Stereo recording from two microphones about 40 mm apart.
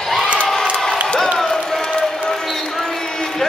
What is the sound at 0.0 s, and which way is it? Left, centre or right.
Crowd, centre.